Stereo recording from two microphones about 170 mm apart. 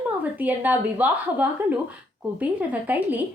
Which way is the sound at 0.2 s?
10° right (ahead or behind).